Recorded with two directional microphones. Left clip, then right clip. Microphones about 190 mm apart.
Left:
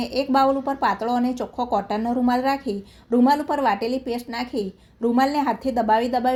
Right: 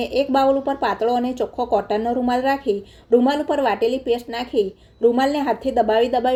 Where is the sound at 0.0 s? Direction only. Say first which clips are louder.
Right 2 dB; 35° left (ahead or behind).